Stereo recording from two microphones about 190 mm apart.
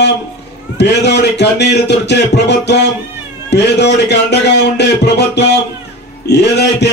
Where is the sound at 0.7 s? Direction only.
65° left (ahead or behind).